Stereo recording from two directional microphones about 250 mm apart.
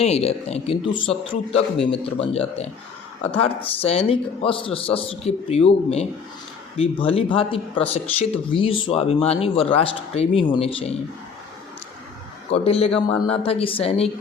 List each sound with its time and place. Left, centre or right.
0.0 s speech: left
12.5 s speech: left